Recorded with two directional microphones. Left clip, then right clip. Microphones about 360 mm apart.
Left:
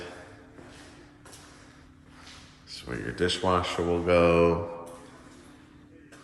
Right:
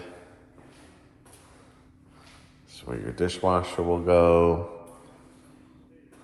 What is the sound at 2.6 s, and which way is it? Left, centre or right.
Speech, centre.